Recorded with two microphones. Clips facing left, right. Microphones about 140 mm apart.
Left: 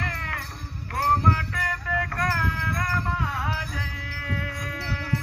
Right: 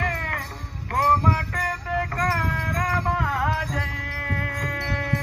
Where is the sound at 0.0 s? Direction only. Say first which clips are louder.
Right 5 dB; 50° right (ahead or behind).